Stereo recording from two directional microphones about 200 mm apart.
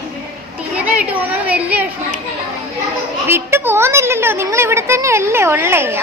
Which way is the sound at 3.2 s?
10° right (ahead or behind).